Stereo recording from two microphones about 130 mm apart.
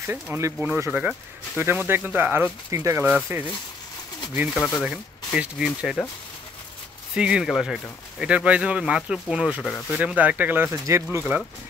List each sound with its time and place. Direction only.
0.0 s speech: 20° right (ahead or behind)
4.6 s speech: 10° left (ahead or behind)
4.8 s speech: 5° right (ahead or behind)
7.2 s speech: 5° right (ahead or behind)
9.6 s speech: 5° left (ahead or behind)
9.9 s speech: 10° right (ahead or behind)